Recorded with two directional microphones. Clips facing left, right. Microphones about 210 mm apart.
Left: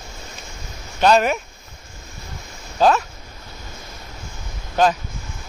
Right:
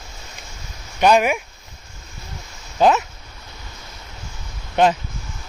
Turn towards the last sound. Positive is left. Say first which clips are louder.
# right 1 dB
turn(degrees=-20)  # may be behind; listen again after turning